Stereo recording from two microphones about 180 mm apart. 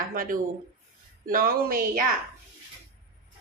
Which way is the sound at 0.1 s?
50° right (ahead or behind).